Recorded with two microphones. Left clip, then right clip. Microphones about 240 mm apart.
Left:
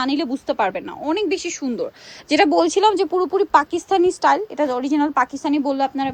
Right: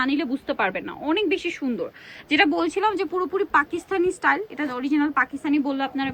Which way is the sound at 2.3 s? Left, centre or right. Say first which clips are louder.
Left 5 dB; left.